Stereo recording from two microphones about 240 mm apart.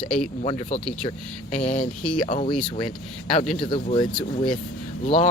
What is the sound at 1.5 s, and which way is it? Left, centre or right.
Speech, left.